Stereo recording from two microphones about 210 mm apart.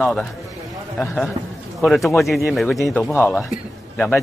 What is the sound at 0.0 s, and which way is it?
Speech, 5° left (ahead or behind).